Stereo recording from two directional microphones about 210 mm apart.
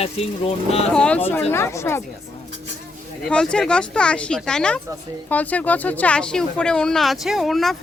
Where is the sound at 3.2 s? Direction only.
5° left (ahead or behind).